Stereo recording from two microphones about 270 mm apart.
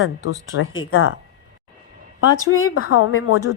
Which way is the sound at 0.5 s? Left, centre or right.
Left.